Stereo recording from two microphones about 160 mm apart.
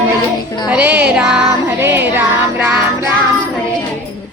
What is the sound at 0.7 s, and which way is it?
Music, 10° right (ahead or behind).